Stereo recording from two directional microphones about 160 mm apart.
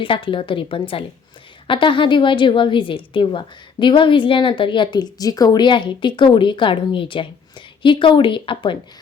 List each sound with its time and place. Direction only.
0.0 s a woman's voice: 30° left (ahead or behind)